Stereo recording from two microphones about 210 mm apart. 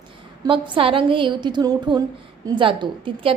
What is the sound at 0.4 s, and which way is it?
A woman's voice, 25° right (ahead or behind).